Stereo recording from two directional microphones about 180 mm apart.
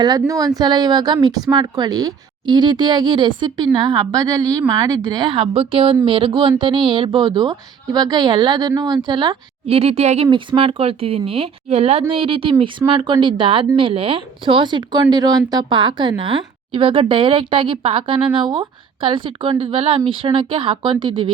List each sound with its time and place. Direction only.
0.0 s a woman's voice: 20° right (ahead or behind)